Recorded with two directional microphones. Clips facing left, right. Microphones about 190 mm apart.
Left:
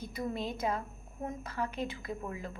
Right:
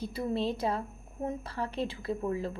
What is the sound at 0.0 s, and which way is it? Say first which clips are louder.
A woman's voice: right 5 dB; 30° right (ahead or behind).